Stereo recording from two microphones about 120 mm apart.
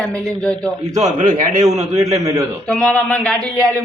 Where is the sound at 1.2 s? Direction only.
90° right.